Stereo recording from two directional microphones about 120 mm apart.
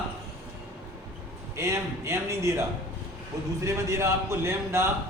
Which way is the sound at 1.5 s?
25° right (ahead or behind).